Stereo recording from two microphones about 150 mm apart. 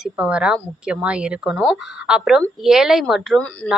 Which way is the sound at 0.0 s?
5° right (ahead or behind).